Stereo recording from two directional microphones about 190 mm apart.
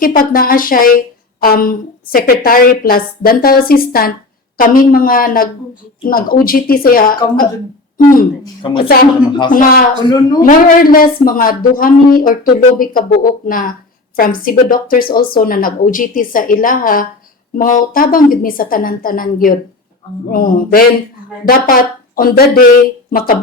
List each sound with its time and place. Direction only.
0.0 s speech: 45° left (ahead or behind)
8.8 s speech: 50° left (ahead or behind)
10.1 s a man's voice: 20° left (ahead or behind)
10.4 s speech: 45° left (ahead or behind)